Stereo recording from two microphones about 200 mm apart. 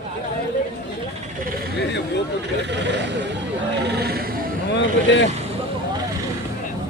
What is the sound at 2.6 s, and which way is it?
Speech, 60° right (ahead or behind).